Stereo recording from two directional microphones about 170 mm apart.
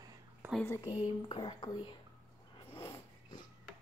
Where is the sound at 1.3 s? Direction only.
30° left (ahead or behind).